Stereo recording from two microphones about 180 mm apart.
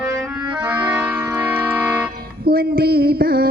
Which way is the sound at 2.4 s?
55° right (ahead or behind).